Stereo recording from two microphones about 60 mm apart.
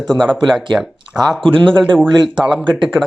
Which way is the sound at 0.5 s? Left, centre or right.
Centre.